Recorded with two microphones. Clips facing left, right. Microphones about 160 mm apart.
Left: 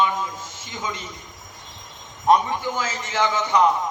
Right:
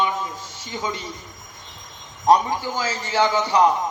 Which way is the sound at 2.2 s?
35° right (ahead or behind).